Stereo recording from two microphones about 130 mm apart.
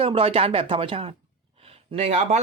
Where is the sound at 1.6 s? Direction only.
45° right (ahead or behind).